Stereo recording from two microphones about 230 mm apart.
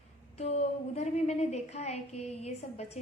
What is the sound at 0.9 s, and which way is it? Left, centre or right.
A woman's voice, left.